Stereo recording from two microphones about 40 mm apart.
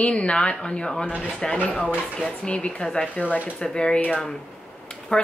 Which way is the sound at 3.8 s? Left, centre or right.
Left.